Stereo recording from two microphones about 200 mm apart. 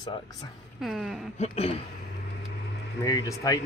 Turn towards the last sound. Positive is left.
turn(degrees=20)  # may be behind; listen again after turning